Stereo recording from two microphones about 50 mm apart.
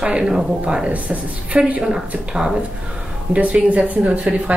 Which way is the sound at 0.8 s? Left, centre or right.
Right.